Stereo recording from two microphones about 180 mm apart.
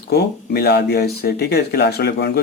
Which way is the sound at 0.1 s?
60° left (ahead or behind).